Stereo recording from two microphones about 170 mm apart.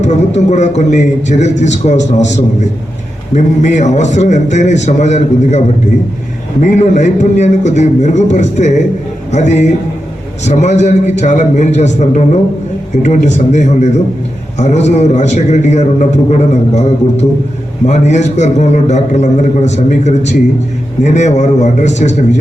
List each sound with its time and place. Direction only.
0.0 s a man's voice: 40° left (ahead or behind)
3.3 s a man's voice: 45° left (ahead or behind)